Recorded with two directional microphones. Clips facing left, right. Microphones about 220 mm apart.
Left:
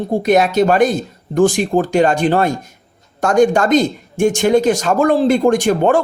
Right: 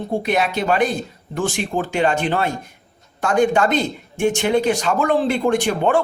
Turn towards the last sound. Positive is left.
turn(degrees=45)  # may be behind; listen again after turning